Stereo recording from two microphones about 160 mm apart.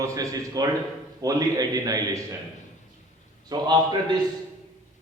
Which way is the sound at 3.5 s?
25° right (ahead or behind).